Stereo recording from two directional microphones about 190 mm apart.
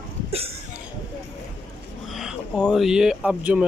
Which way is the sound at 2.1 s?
Centre (ahead or behind).